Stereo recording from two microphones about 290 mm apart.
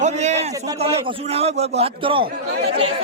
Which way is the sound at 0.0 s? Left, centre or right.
Right.